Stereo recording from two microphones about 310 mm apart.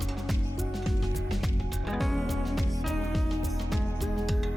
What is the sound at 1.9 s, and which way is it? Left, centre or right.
Music, centre.